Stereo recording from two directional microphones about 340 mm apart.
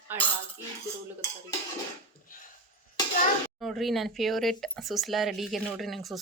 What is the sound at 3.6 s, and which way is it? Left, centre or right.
Speech, centre.